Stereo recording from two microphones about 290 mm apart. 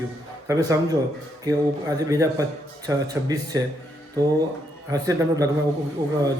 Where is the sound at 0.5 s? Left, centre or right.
Centre.